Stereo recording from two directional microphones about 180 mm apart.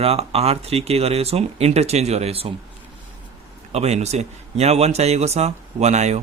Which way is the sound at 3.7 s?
35° right (ahead or behind).